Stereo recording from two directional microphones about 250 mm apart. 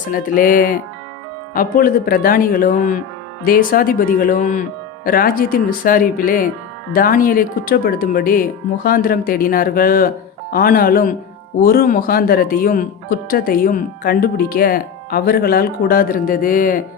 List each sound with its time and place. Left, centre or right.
0.1 s speech: left